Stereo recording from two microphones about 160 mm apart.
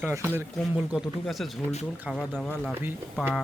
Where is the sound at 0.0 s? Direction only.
15° right (ahead or behind).